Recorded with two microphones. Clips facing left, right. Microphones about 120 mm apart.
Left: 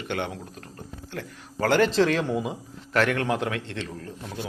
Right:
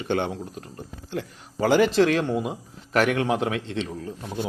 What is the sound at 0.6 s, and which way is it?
Speech, 15° right (ahead or behind).